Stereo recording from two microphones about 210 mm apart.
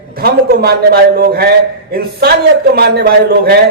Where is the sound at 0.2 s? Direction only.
50° right (ahead or behind).